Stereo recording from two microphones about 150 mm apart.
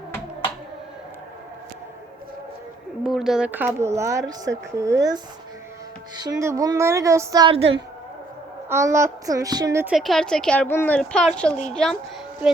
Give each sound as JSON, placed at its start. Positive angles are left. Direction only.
{"t": 3.0, "sound": "speech", "side_deg": -5}
{"t": 8.7, "sound": "speech", "side_deg": -20}
{"t": 9.8, "sound": "speech", "side_deg": 0}